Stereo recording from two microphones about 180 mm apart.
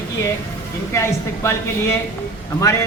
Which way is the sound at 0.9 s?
15° left (ahead or behind).